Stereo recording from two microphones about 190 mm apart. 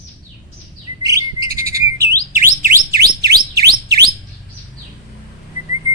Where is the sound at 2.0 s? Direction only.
50° right (ahead or behind).